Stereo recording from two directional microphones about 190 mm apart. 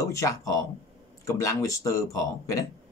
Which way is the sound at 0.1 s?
15° left (ahead or behind).